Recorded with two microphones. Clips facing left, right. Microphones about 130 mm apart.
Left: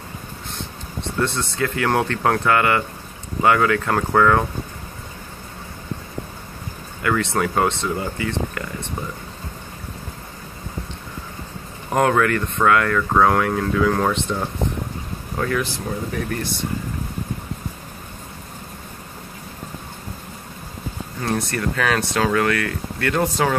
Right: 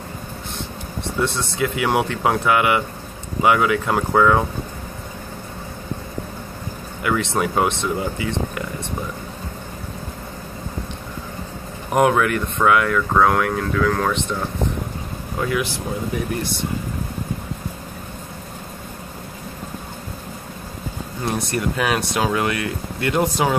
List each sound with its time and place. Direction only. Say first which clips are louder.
1.2 s speech: right 1 dB; 10° right (ahead or behind)
7.0 s speech: even; 15° right (ahead or behind)
11.9 s speech: right 1 dB; 15° right (ahead or behind); by 14.1 s 5° left (ahead or behind)
15.3 s speech: even; 10° right (ahead or behind)
21.2 s speech: even; 15° right (ahead or behind)